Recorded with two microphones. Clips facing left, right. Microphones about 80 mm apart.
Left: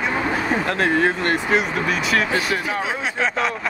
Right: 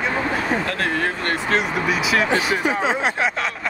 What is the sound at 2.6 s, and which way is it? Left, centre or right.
Speech, right.